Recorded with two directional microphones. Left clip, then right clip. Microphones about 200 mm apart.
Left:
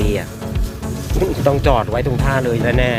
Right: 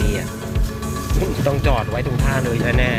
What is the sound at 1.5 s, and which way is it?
Speech, 35° left (ahead or behind).